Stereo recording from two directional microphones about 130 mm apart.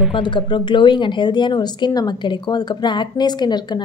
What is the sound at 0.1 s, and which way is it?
Speech, 40° left (ahead or behind).